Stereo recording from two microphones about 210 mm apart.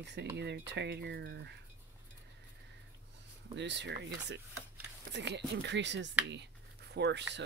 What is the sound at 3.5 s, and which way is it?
Speech, 55° right (ahead or behind).